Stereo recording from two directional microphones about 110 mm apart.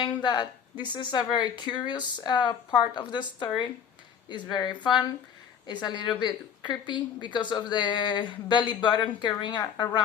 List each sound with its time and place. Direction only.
0.0 s a woman's voice: 45° left (ahead or behind)